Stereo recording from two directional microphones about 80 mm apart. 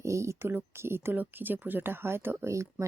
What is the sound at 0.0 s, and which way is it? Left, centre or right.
Speech, right.